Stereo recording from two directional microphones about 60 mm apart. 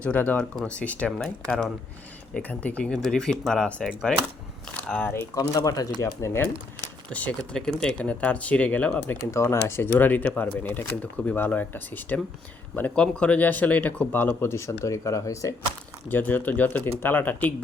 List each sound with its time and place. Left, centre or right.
0.0 s speech: left; by 1.7 s centre
2.3 s speech: left
3.0 s speech: centre; by 5.1 s left
5.3 s speech: left
7.1 s speech: left
9.3 s speech: left
14.4 s speech: left
16.0 s speech: left